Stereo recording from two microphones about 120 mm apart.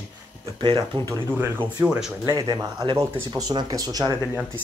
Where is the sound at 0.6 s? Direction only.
40° right (ahead or behind).